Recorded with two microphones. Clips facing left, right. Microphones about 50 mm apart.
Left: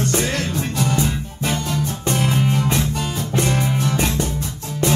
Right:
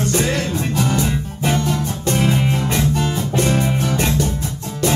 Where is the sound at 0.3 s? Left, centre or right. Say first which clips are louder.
Right 2 dB; centre.